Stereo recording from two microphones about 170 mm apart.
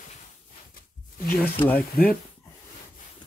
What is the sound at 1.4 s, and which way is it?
Speech, 10° left (ahead or behind).